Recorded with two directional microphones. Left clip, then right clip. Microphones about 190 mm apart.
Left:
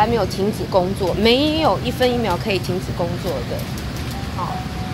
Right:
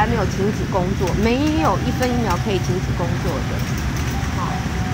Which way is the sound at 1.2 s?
50° left (ahead or behind).